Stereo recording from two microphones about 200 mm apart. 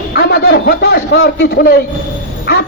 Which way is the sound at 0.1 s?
55° left (ahead or behind).